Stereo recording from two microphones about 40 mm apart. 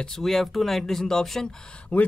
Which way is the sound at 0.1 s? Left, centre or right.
Centre.